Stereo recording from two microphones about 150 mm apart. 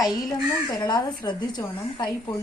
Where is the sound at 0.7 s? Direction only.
30° left (ahead or behind).